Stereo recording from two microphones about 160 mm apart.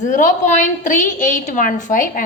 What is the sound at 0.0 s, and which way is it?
A woman's voice, 55° left (ahead or behind).